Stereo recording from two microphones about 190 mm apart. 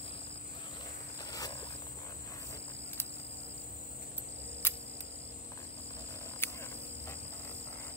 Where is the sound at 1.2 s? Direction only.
20° left (ahead or behind).